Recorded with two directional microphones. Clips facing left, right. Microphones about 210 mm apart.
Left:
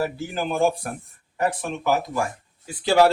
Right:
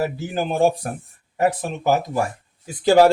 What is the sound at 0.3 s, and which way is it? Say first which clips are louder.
Speech: right 3 dB; 40° right (ahead or behind).